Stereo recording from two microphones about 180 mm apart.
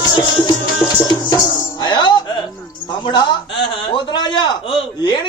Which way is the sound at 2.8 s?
25° left (ahead or behind).